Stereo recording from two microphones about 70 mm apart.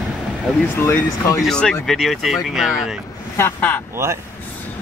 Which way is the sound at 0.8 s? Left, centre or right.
Left.